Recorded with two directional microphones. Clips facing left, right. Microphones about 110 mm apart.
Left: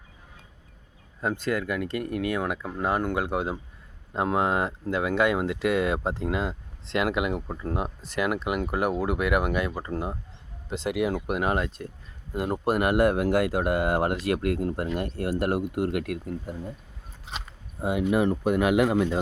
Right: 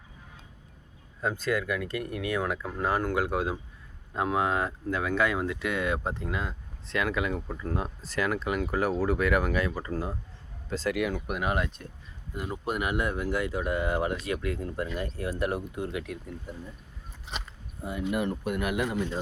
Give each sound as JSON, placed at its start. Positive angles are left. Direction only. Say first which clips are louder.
{"t": 1.2, "sound": "speech", "louder": "left 1 dB", "side_deg": 25}
{"t": 12.3, "sound": "speech", "louder": "left 7 dB", "side_deg": 45}
{"t": 17.7, "sound": "a man's voice", "louder": "left 6 dB", "side_deg": 90}